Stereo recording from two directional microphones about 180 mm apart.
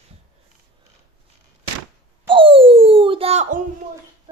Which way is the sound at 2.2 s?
30° right (ahead or behind).